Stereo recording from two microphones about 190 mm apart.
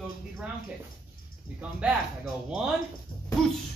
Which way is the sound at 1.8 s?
5° right (ahead or behind).